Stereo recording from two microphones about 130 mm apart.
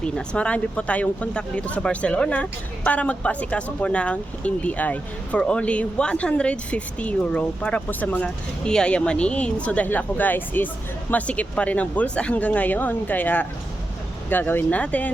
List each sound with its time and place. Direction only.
0.0 s speech: 10° left (ahead or behind)